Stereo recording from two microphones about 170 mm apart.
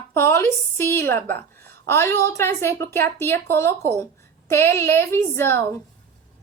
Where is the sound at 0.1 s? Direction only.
15° left (ahead or behind).